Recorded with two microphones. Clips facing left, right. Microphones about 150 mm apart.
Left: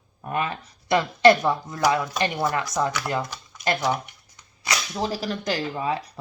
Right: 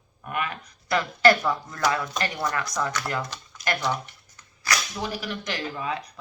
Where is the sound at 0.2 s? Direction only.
30° left (ahead or behind).